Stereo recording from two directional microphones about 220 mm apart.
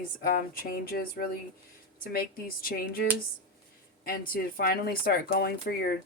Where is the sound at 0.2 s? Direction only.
40° left (ahead or behind).